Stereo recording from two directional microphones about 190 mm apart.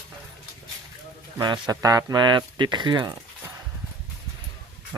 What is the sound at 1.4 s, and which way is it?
Speech, 20° right (ahead or behind).